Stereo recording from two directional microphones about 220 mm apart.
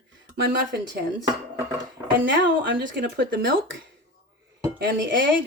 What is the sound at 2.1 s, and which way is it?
Speech, 55° right (ahead or behind).